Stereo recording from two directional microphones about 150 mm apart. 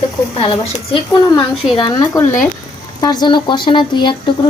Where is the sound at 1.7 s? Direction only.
30° left (ahead or behind).